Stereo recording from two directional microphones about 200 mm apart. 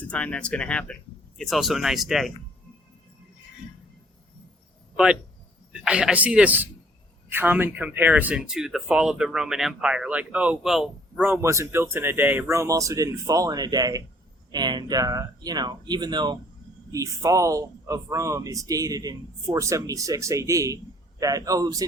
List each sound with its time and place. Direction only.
0.1 s speech: 5° left (ahead or behind)
5.7 s speech: 5° right (ahead or behind)